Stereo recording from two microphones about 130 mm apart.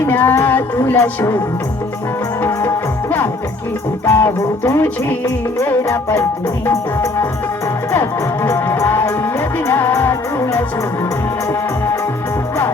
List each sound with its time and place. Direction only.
0.0 s music: 15° left (ahead or behind)
2.4 s music: 20° left (ahead or behind)
8.4 s music: 20° left (ahead or behind)